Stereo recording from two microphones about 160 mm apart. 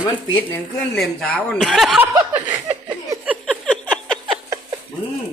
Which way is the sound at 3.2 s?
10° right (ahead or behind).